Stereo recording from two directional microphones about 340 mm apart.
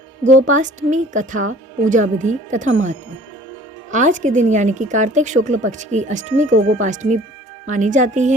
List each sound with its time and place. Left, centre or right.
0.3 s a woman's voice: right
3.9 s a woman's voice: right
6.5 s speech: right
6.8 s a woman's voice: right